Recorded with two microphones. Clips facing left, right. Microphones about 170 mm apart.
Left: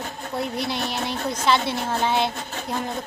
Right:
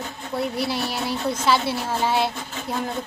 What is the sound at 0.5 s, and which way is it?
Child singing, 5° right (ahead or behind).